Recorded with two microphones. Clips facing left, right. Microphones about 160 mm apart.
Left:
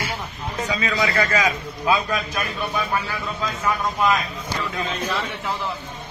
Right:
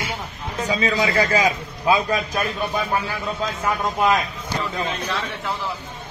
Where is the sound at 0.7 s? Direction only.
30° right (ahead or behind).